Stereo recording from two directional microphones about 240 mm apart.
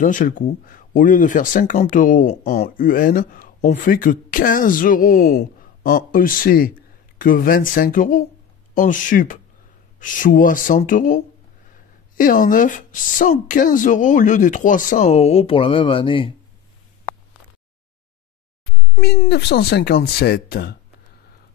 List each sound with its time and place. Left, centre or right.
0.0 s speech: left
18.9 s speech: left